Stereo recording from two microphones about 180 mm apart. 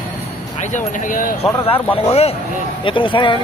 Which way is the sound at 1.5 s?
15° left (ahead or behind).